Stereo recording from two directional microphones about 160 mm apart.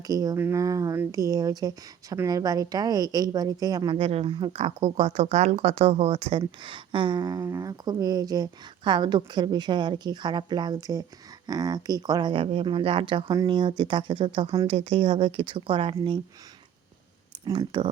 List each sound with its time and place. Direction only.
0.1 s speech: 25° right (ahead or behind); by 6.4 s 45° right (ahead or behind)
6.6 s speech: 30° right (ahead or behind)
17.4 s speech: 25° right (ahead or behind)